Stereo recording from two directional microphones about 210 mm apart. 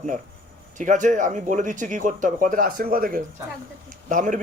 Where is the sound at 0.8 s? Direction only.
35° right (ahead or behind).